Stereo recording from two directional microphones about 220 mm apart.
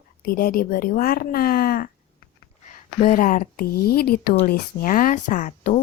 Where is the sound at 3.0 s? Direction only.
35° left (ahead or behind).